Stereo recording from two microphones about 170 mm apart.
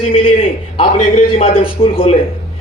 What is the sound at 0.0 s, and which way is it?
A man's voice, 35° left (ahead or behind).